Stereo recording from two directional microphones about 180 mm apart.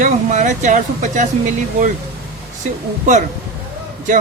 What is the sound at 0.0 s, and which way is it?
Speech, 40° right (ahead or behind).